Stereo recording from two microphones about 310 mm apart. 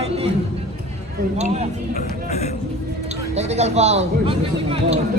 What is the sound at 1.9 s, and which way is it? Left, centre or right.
Speech, left.